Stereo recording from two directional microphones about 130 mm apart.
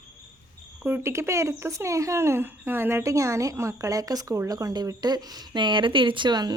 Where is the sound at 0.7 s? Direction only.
15° right (ahead or behind).